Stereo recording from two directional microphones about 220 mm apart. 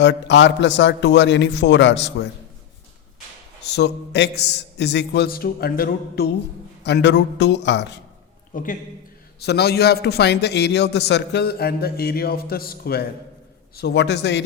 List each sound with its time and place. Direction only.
0.0 s a man's voice: 50° left (ahead or behind)
3.6 s a man's voice: 50° left (ahead or behind)
8.5 s a man's voice: 40° left (ahead or behind)